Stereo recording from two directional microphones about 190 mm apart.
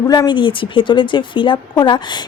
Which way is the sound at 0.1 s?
20° left (ahead or behind).